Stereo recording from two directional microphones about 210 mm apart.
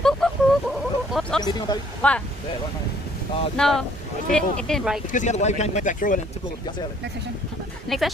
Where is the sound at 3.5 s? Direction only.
Centre (ahead or behind).